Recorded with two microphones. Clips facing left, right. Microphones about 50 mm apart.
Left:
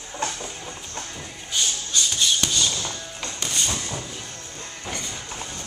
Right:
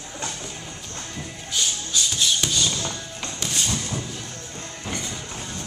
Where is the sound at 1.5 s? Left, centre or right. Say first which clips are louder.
Even; centre.